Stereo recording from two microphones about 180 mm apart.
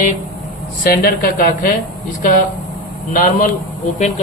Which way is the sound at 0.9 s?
55° left (ahead or behind).